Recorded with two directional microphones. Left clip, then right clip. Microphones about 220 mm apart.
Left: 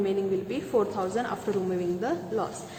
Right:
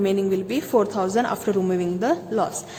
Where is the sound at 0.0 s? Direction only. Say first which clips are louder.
Right 5 dB; 50° right (ahead or behind).